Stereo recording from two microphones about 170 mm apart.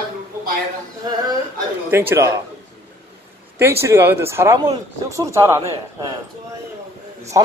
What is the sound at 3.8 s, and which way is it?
A man's voice, 15° right (ahead or behind).